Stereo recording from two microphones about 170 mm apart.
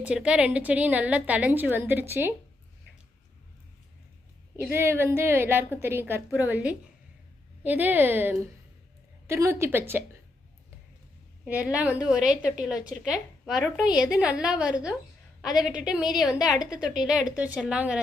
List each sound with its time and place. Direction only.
0.0 s a woman's voice: 5° right (ahead or behind)
4.7 s a woman's voice: 15° right (ahead or behind)
11.4 s a woman's voice: 10° right (ahead or behind)